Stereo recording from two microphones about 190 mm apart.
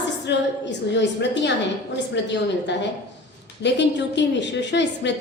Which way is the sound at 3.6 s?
65° left (ahead or behind).